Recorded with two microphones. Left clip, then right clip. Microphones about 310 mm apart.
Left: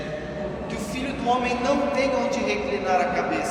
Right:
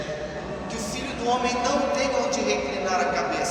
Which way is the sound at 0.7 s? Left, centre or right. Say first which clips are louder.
Left 1 dB; left.